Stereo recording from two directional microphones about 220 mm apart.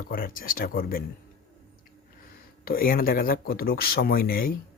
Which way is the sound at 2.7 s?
40° left (ahead or behind).